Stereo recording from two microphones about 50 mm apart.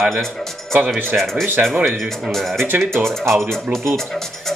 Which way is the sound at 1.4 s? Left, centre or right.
Right.